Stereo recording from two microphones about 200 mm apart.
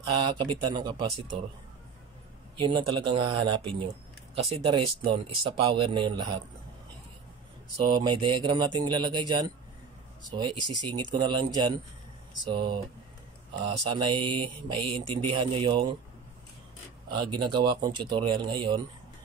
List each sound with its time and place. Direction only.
0.2 s speech: 20° right (ahead or behind)
2.6 s speech: 25° right (ahead or behind)
7.9 s speech: 25° right (ahead or behind)
13.8 s speech: 25° right (ahead or behind)
17.1 s speech: 20° right (ahead or behind)